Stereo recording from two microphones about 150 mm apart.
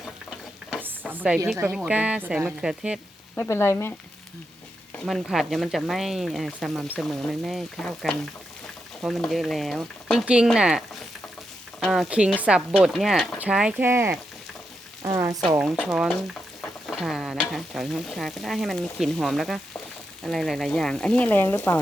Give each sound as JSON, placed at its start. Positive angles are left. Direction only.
{"t": 0.8, "sound": "stir", "side_deg": -10}
{"t": 1.7, "sound": "speech", "side_deg": -5}
{"t": 3.3, "sound": "speech", "side_deg": 15}
{"t": 5.0, "sound": "stir", "side_deg": 0}
{"t": 11.8, "sound": "a woman's voice", "side_deg": 0}
{"t": 12.7, "sound": "stir", "side_deg": 0}
{"t": 13.4, "sound": "speech", "side_deg": -5}
{"t": 15.0, "sound": "frying", "side_deg": -20}
{"t": 15.4, "sound": "stir", "side_deg": 0}